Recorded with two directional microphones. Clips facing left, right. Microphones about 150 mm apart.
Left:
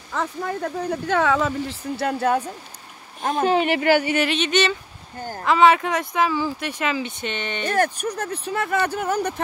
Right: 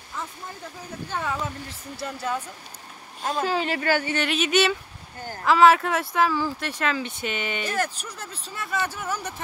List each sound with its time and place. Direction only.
0.1 s speech: 75° left (ahead or behind)
3.3 s speech: 20° left (ahead or behind)
4.3 s speech: 5° right (ahead or behind)
7.6 s speech: 55° left (ahead or behind)